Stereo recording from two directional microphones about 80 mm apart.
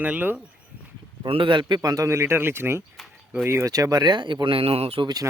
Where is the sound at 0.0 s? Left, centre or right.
Right.